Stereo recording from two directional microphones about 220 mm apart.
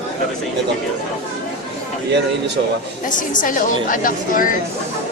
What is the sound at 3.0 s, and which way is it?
A woman's voice, 35° left (ahead or behind).